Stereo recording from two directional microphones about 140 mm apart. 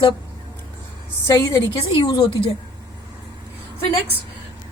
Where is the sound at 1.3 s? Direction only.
20° left (ahead or behind).